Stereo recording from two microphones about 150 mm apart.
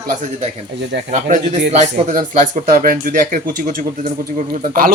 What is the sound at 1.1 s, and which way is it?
Speech, 50° right (ahead or behind).